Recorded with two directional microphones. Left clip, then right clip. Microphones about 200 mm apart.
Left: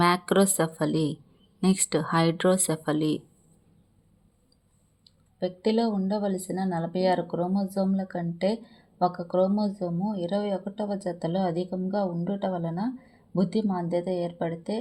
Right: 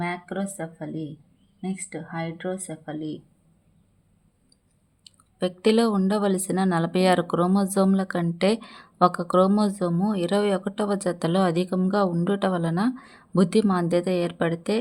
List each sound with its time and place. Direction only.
0.0 s speech: 45° left (ahead or behind)
5.0 s speech: 20° right (ahead or behind)